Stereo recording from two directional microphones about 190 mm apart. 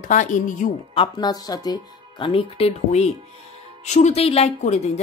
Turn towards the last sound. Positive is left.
turn(degrees=35)  # may be behind; listen again after turning